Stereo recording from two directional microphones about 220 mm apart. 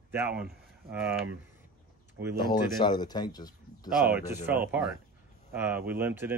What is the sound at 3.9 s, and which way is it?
Speech, 5° right (ahead or behind).